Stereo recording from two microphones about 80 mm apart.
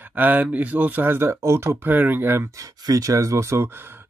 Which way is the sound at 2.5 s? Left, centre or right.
Right.